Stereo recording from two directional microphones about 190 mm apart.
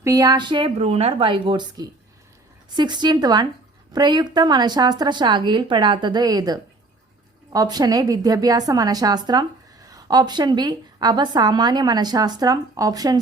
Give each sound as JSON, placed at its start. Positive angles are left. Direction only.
{"t": 0.0, "sound": "a woman's voice", "side_deg": -15}